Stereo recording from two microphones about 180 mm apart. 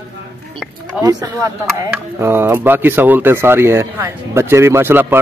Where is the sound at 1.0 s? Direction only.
20° right (ahead or behind).